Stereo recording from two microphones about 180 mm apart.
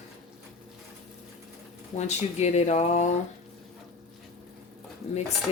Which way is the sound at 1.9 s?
40° left (ahead or behind).